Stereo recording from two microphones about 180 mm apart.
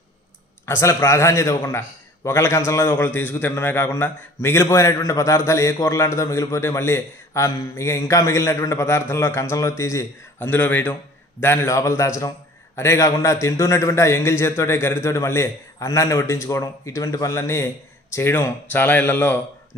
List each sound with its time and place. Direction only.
0.7 s a man's voice: 15° left (ahead or behind)